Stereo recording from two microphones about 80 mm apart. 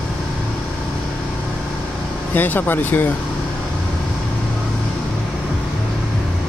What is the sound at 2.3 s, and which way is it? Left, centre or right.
Speech, left.